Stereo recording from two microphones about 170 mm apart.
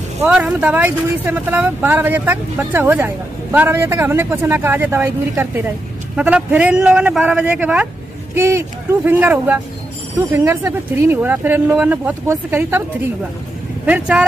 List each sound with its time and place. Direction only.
0.3 s speech: 5° right (ahead or behind)